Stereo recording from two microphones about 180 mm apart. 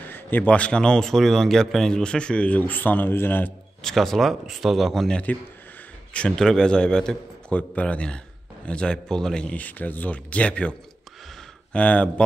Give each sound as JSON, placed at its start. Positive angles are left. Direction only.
{"t": 0.1, "sound": "a man's voice", "side_deg": 10}